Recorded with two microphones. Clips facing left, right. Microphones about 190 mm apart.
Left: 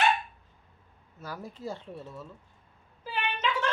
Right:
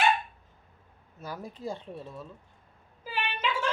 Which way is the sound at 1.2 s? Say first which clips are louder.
Right 1 dB; 15° right (ahead or behind).